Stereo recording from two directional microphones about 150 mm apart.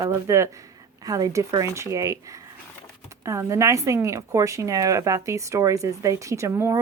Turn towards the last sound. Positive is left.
turn(degrees=-15)  # may be behind; listen again after turning